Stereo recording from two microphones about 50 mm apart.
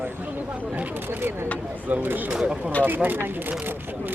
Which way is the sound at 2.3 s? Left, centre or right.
Centre.